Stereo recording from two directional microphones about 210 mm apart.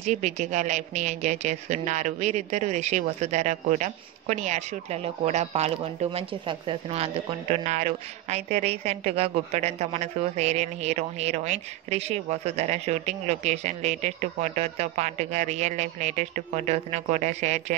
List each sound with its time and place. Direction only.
0.0 s speech: 35° right (ahead or behind)